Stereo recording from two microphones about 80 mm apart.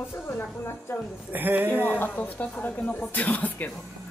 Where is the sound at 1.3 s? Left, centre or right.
Right.